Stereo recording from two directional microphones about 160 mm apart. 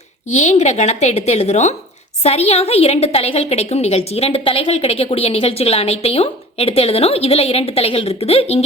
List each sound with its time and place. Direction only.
0.3 s a woman's voice: 45° left (ahead or behind)